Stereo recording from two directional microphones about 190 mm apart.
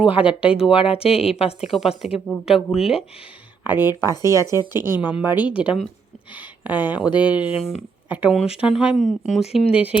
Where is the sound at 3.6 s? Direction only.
10° right (ahead or behind).